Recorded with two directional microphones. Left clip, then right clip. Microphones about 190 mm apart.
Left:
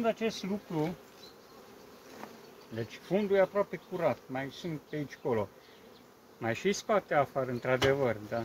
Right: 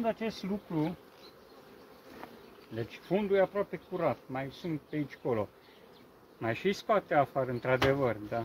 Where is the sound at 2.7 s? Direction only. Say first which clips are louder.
Even; 15° right (ahead or behind).